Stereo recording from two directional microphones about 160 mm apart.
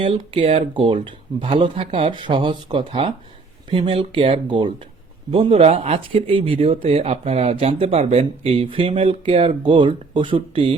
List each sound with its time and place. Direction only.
0.0 s speech: 35° right (ahead or behind)